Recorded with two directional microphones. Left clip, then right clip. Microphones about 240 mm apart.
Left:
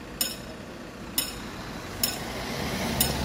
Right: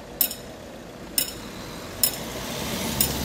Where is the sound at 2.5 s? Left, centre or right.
Right.